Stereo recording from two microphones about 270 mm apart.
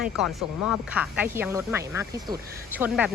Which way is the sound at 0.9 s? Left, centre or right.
Centre.